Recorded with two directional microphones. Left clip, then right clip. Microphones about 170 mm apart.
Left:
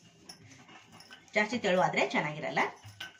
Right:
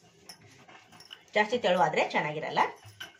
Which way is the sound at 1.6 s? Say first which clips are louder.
Right 2 dB; 30° right (ahead or behind).